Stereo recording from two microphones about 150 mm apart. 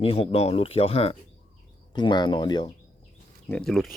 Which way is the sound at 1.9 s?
30° left (ahead or behind).